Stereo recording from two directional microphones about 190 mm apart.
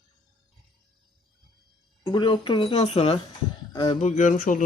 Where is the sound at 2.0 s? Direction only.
25° left (ahead or behind).